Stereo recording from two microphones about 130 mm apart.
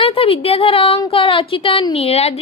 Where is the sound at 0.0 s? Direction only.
45° left (ahead or behind).